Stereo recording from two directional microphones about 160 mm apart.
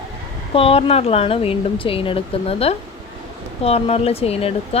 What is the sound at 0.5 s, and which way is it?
A woman's voice, 35° left (ahead or behind).